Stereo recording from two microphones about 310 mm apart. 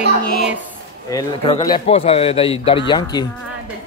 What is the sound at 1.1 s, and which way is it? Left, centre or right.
Speech, centre.